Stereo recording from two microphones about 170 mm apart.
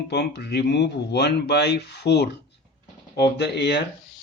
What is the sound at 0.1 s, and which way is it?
Speech, 80° left.